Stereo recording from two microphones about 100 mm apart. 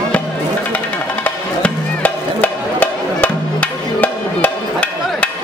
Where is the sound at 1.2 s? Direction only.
15° left (ahead or behind).